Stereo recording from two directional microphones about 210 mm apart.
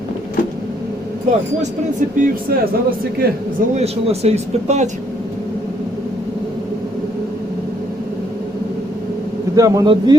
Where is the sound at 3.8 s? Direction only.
30° right (ahead or behind).